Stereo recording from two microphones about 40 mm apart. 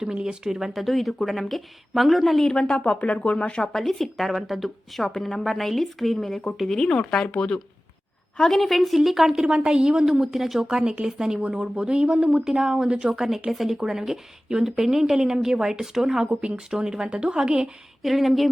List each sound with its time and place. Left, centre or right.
0.0 s speech: centre
2.6 s speech: left
3.6 s speech: centre
8.4 s speech: centre
9.5 s speech: right
12.9 s speech: right
13.1 s speech: centre
16.2 s speech: right
16.6 s speech: centre
18.0 s speech: centre